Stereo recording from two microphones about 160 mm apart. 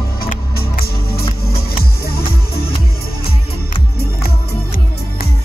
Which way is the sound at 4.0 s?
75° left (ahead or behind).